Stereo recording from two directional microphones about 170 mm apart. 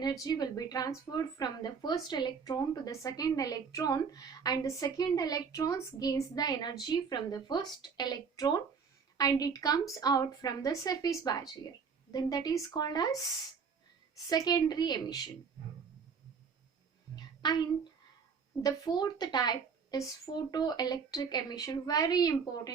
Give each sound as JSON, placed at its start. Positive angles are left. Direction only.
{"t": 0.0, "sound": "a woman's voice", "side_deg": 25}
{"t": 14.3, "sound": "a woman's voice", "side_deg": 25}
{"t": 17.2, "sound": "a sound", "side_deg": 25}
{"t": 18.6, "sound": "a woman's voice", "side_deg": 25}